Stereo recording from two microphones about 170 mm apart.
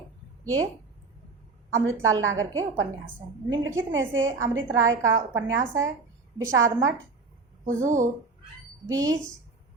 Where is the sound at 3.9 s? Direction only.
90° right.